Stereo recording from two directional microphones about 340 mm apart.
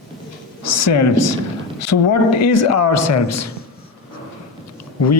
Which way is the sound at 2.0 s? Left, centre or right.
Left.